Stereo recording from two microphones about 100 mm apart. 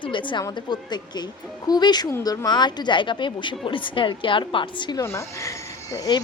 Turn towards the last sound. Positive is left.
turn(degrees=35)  # may be behind; listen again after turning